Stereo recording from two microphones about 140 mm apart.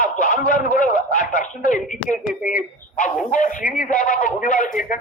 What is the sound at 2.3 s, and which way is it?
Speech, 5° right (ahead or behind).